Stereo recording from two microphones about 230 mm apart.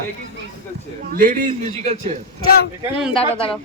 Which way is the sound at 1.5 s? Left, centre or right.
Right.